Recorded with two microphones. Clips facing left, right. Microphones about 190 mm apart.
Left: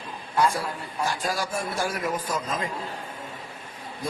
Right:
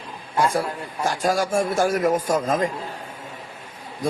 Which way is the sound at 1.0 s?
45° right (ahead or behind).